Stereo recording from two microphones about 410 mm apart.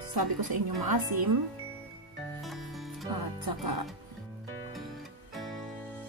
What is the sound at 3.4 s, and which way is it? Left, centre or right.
Speech, right.